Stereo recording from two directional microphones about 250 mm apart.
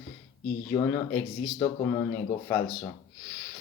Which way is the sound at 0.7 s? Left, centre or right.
Centre.